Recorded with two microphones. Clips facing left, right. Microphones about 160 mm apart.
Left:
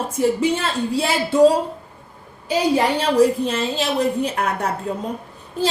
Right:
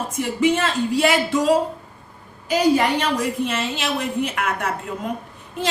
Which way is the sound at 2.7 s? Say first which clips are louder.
Left 4 dB; 30° left (ahead or behind).